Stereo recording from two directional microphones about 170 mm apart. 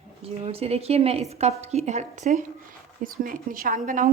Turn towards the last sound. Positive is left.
turn(degrees=-50)  # may be behind; listen again after turning